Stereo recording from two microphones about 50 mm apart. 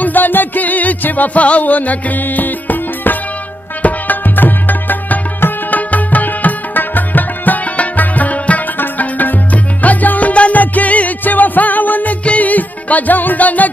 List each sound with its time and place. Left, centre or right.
0.0 s music: left